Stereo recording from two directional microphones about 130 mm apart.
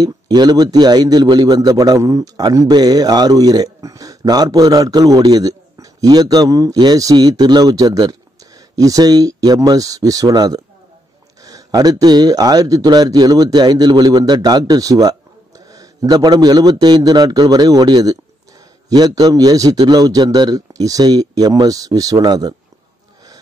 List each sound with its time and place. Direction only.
0.0 s a man's voice: 35° right (ahead or behind)